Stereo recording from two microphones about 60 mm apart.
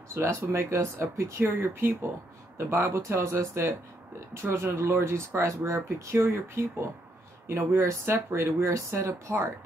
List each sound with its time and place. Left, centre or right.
0.1 s speech: right
1.4 s speech: right
2.5 s speech: right